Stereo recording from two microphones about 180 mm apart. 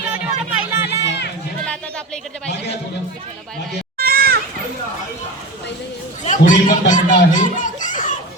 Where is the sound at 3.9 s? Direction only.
55° right (ahead or behind).